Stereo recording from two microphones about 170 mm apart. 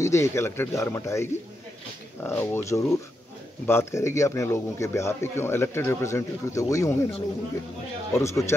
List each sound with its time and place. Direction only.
0.0 s speech: 15° left (ahead or behind)
8.1 s speech: 15° left (ahead or behind)